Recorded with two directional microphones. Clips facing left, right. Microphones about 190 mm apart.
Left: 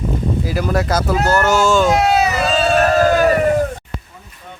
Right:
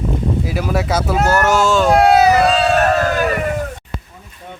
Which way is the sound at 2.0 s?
60° right (ahead or behind).